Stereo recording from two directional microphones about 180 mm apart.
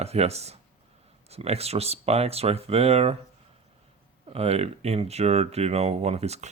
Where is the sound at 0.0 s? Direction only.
35° right (ahead or behind).